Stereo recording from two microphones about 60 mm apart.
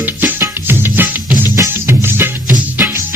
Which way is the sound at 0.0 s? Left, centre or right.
Right.